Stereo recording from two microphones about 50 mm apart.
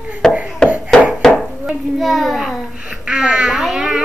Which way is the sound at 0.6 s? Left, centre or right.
Right.